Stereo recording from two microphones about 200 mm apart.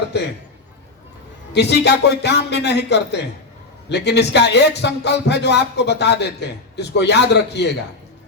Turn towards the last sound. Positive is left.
turn(degrees=55)  # may be behind; listen again after turning